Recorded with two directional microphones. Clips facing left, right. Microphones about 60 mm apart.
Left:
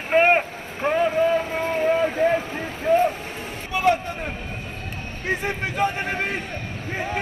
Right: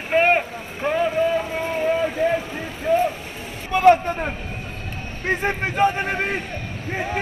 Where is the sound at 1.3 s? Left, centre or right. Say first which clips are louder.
Left 1 dB; left.